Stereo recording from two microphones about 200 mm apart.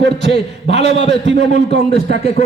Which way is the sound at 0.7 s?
60° right (ahead or behind).